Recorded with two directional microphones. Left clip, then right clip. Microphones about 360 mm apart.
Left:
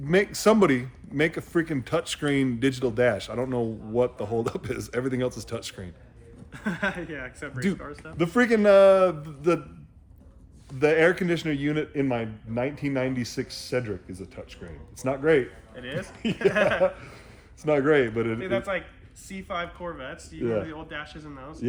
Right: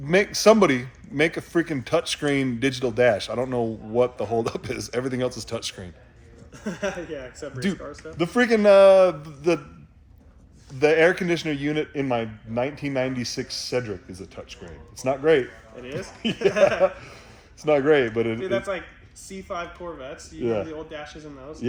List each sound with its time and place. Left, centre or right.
0.0 s speech: centre
8.2 s speech: centre
10.8 s speech: centre
19.5 s speech: left
20.4 s speech: centre